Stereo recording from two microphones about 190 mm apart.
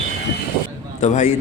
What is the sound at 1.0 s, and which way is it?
Speech, 35° left (ahead or behind).